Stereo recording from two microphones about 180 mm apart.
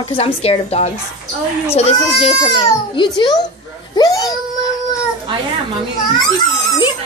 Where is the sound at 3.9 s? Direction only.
20° left (ahead or behind).